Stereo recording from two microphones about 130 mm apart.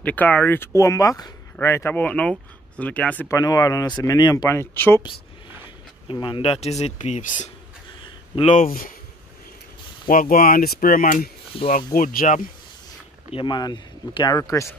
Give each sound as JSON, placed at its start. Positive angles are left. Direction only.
{"t": 0.0, "sound": "speech", "side_deg": 10}
{"t": 3.3, "sound": "speech", "side_deg": 25}
{"t": 4.6, "sound": "speech", "side_deg": 20}
{"t": 6.0, "sound": "speech", "side_deg": 40}
{"t": 8.5, "sound": "speech", "side_deg": 90}
{"t": 10.0, "sound": "speech", "side_deg": 90}
{"t": 13.3, "sound": "speech", "side_deg": 40}